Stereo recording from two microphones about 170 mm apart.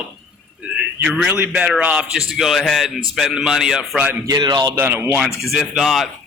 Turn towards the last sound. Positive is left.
turn(degrees=0)  # may be behind; listen again after turning